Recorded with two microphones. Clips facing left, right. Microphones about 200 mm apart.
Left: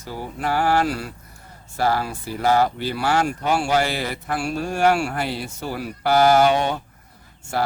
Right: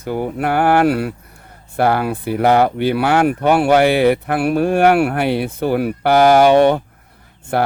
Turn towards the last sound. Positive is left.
turn(degrees=-60)  # may be behind; listen again after turning